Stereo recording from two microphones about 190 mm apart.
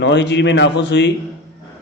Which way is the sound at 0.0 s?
65° left (ahead or behind).